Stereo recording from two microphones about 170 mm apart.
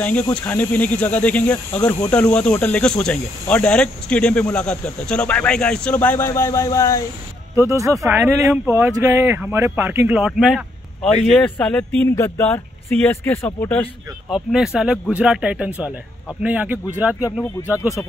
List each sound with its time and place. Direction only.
0.0 s speech: 10° left (ahead or behind)
7.5 s speech: 20° right (ahead or behind); by 13.8 s 10° left (ahead or behind)
14.3 s speech: 5° right (ahead or behind)
17.7 s speech: 15° left (ahead or behind)